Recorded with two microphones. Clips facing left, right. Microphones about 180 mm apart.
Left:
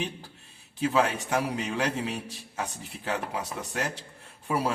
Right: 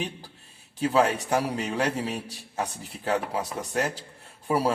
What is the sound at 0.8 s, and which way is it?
A man's voice, 35° right (ahead or behind).